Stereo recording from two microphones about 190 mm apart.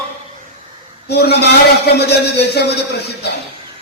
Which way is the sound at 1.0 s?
60° left (ahead or behind).